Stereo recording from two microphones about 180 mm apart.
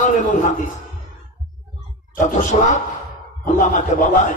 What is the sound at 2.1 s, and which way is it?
A man's voice, 45° left (ahead or behind).